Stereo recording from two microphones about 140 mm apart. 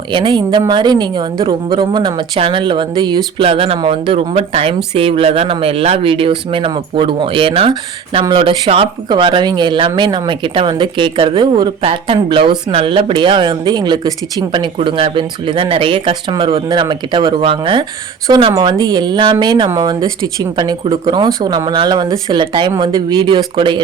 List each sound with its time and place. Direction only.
0.1 s speech: 35° right (ahead or behind)